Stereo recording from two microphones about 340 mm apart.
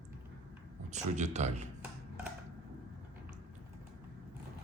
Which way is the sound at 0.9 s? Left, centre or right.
Centre.